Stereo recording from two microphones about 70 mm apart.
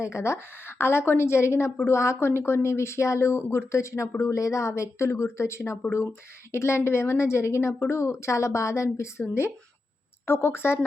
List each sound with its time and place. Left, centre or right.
0.0 s a woman's voice: left
10.2 s a woman's voice: left